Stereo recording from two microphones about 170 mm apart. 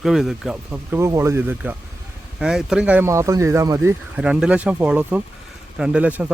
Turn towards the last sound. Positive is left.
turn(degrees=-10)  # may be behind; listen again after turning